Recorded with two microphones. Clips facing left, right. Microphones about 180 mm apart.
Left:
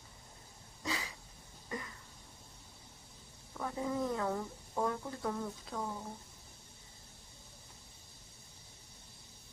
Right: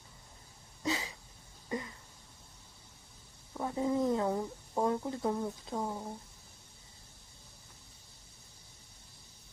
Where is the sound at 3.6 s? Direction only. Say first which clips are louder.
Right 5 dB; 25° right (ahead or behind).